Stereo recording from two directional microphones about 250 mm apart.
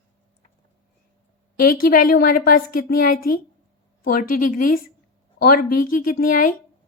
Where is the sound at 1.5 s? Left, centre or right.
Left.